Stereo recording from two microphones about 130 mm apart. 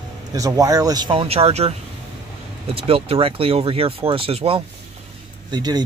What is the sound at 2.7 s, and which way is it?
Speech, 45° right (ahead or behind).